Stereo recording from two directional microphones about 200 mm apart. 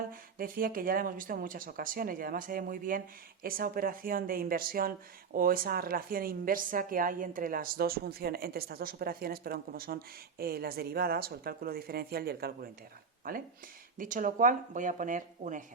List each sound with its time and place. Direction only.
0.1 s speech: 45° right (ahead or behind)